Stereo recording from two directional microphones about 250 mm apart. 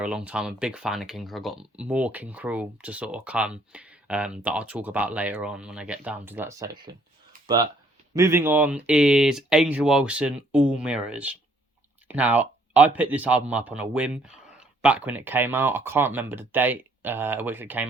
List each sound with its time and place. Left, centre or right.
0.0 s speech: centre